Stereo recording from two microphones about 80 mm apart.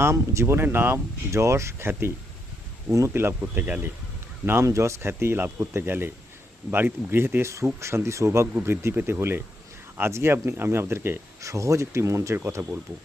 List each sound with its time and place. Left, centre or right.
0.0 s speech: right
4.6 s speech: right
11.4 s speech: right